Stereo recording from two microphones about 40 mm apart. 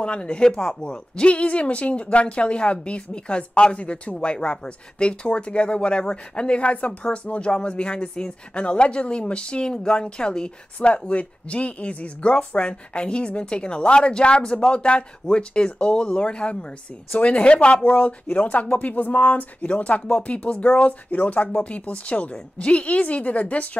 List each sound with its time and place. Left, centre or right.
0.0 s a woman's voice: left
19.7 s a woman's voice: left